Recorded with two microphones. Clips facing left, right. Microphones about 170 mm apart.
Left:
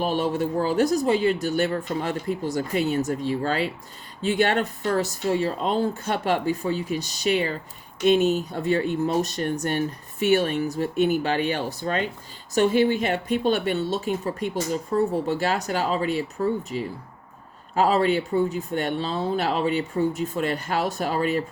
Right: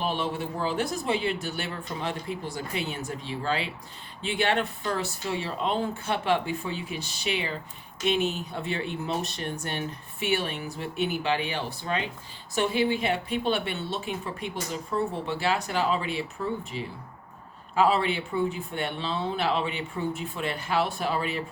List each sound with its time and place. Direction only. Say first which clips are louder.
0.0 s speech: left 6 dB; 40° left (ahead or behind)